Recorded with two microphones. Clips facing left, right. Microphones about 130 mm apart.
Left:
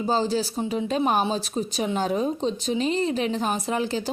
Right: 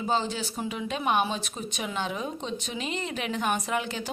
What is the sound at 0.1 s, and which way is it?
A woman's voice, 35° left (ahead or behind).